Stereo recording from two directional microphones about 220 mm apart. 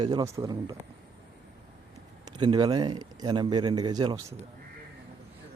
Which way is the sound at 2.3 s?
20° right (ahead or behind).